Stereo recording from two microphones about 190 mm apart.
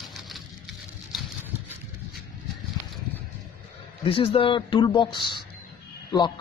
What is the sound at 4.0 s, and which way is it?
Speech, 30° left (ahead or behind).